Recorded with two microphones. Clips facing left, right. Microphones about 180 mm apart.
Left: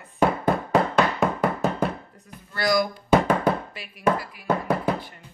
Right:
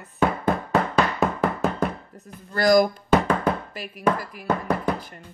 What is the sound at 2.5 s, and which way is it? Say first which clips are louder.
Speech: right 5 dB; 45° right (ahead or behind).